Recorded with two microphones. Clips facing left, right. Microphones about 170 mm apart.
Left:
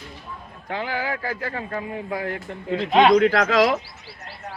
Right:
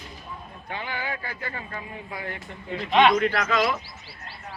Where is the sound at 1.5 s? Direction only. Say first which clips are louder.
Left 7 dB; 60° left (ahead or behind).